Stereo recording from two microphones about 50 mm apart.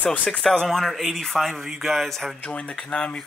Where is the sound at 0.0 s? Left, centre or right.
Left.